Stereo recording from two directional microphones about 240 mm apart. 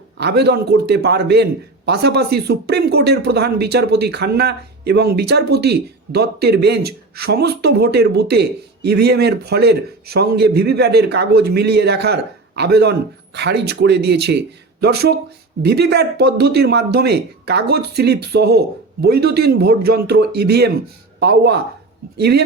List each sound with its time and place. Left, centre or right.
0.2 s a man's voice: right